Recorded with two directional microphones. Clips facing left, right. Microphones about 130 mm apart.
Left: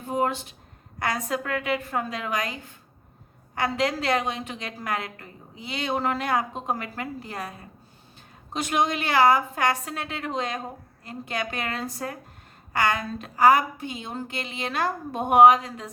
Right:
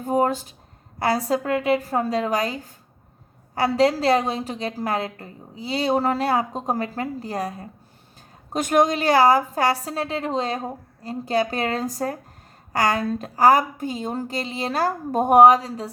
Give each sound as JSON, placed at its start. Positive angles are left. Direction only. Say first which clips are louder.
{"t": 0.0, "sound": "a woman's voice", "louder": "right 5 dB", "side_deg": -40}
{"t": 8.5, "sound": "a woman's voice", "louder": "right 6 dB", "side_deg": -45}